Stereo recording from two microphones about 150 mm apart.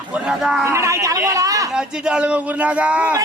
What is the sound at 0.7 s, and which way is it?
Speech, 20° right (ahead or behind).